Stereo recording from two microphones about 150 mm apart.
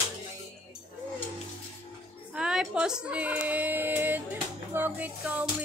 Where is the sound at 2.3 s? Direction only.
5° right (ahead or behind).